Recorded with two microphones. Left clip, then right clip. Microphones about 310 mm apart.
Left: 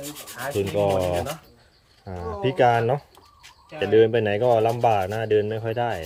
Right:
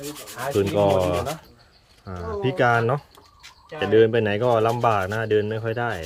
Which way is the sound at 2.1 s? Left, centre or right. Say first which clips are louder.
Even; centre.